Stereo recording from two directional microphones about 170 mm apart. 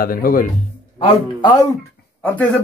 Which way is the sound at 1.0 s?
25° left (ahead or behind).